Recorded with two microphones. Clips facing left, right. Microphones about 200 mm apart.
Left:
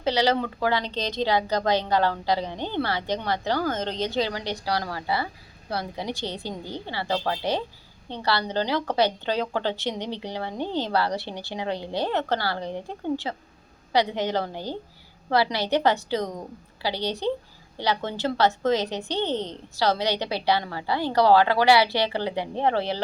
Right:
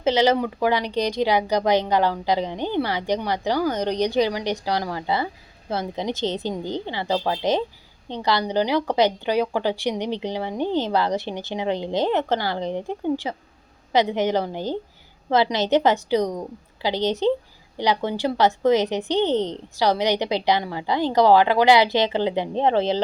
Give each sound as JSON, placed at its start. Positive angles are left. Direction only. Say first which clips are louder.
{"t": 0.0, "sound": "a woman's voice", "louder": "right 4 dB", "side_deg": -20}